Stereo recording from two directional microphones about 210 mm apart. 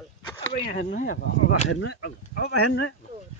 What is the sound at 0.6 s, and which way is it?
Speech, 40° left (ahead or behind).